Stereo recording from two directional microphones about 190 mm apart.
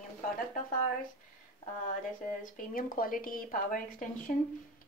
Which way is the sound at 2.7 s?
45° left (ahead or behind).